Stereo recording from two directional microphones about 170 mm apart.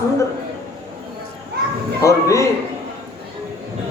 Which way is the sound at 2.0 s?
20° left (ahead or behind).